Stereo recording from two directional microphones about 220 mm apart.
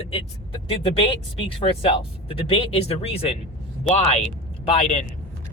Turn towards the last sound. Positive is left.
turn(degrees=25)  # may be behind; listen again after turning